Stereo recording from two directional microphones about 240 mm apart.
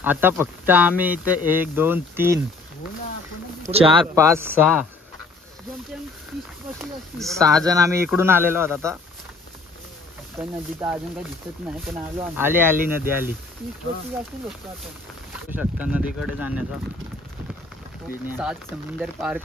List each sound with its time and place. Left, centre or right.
0.0 s speech: centre
3.7 s speech: right
4.1 s speech: centre
6.8 s speech: centre
7.5 s speech: centre
10.3 s speech: centre
12.4 s speech: centre
15.5 s speech: centre
18.2 s speech: centre